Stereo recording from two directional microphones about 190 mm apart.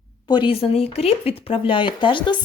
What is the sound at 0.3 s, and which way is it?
Speech, 25° left (ahead or behind).